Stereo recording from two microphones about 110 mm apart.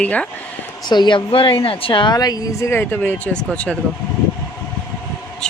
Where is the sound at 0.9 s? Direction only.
45° left (ahead or behind); by 3.7 s 10° left (ahead or behind).